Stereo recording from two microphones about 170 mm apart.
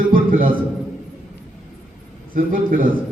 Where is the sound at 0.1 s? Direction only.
55° right (ahead or behind).